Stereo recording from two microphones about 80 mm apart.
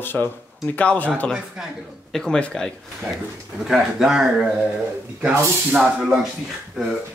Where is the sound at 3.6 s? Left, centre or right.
Centre.